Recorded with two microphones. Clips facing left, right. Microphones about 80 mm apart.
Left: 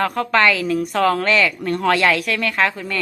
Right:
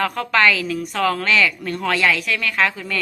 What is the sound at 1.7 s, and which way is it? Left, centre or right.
Speech, left.